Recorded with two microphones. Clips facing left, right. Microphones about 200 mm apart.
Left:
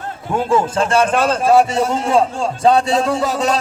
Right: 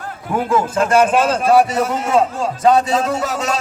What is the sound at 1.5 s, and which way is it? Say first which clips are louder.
A man's voice: left 1 dB; 30° left (ahead or behind).